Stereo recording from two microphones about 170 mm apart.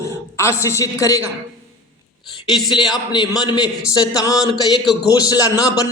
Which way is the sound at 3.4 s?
25° left (ahead or behind).